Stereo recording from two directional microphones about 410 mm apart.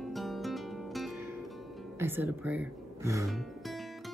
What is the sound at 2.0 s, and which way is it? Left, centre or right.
Speech, centre.